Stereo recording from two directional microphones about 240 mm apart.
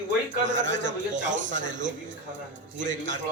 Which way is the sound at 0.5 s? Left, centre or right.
Right.